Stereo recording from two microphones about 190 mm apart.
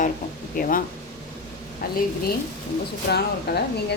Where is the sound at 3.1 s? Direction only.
60° left (ahead or behind).